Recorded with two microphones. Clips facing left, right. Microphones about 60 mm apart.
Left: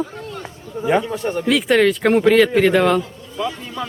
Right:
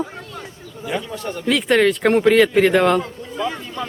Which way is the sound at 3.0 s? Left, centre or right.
Right.